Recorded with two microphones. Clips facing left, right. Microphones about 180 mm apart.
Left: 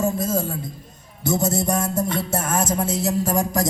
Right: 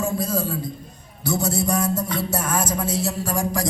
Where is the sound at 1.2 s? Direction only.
20° left (ahead or behind).